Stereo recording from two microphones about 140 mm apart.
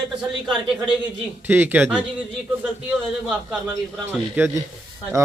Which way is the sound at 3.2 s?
Centre (ahead or behind).